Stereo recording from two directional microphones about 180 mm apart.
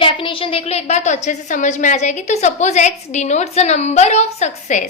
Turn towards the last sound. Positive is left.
turn(degrees=40)  # may be behind; listen again after turning